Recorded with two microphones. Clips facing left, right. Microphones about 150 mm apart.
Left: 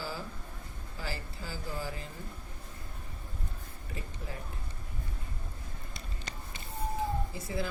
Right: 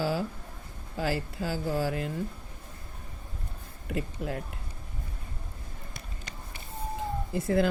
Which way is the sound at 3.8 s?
70° right (ahead or behind).